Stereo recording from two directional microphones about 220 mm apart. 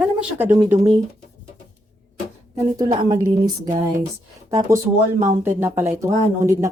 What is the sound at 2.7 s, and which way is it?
Speech, 15° right (ahead or behind).